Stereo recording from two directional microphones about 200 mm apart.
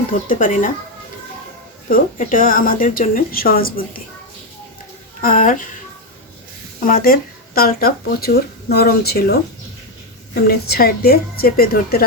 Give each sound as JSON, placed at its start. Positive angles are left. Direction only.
{"t": 0.1, "sound": "speech", "side_deg": 40}
{"t": 1.9, "sound": "speech", "side_deg": 45}
{"t": 5.2, "sound": "speech", "side_deg": 45}
{"t": 6.8, "sound": "speech", "side_deg": 45}